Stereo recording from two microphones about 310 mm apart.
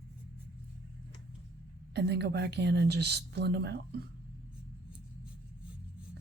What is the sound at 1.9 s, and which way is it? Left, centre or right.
A woman's voice, right.